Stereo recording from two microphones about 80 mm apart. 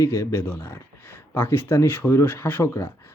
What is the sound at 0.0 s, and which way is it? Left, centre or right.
Speech, left.